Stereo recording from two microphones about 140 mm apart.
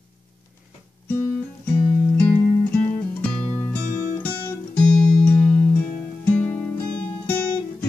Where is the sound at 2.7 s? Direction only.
10° left (ahead or behind).